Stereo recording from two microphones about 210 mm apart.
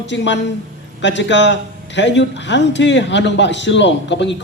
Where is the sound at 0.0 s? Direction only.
55° left (ahead or behind).